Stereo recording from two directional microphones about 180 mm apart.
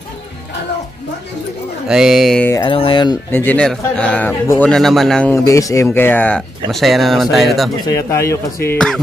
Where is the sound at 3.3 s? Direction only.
10° left (ahead or behind).